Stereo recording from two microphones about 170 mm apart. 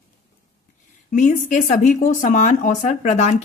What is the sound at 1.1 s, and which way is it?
A woman's voice, 45° left (ahead or behind).